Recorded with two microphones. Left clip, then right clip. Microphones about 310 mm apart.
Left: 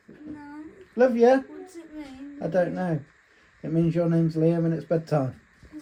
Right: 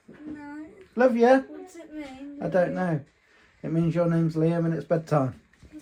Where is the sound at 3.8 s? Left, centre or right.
Right.